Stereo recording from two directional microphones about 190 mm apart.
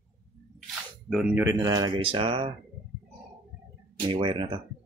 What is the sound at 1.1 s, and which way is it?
Speech, 10° right (ahead or behind).